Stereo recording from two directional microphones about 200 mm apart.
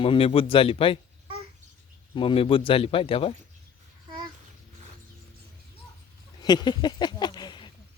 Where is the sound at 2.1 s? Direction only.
25° left (ahead or behind).